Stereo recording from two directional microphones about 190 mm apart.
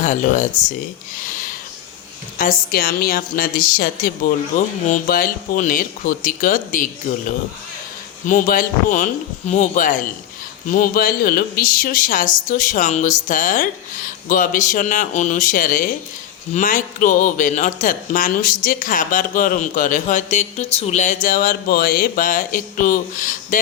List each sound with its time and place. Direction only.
0.0 s speech: 40° left (ahead or behind)
2.4 s speech: 45° left (ahead or behind)
8.3 s speech: 45° left (ahead or behind)